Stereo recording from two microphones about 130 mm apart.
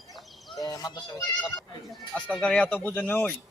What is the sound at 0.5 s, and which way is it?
Speech, 25° left (ahead or behind).